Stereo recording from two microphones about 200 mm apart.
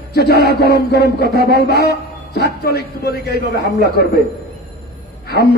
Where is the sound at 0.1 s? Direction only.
55° left (ahead or behind).